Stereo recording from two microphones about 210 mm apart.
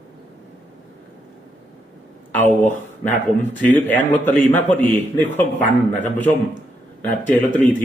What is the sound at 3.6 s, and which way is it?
Speech, 10° left (ahead or behind).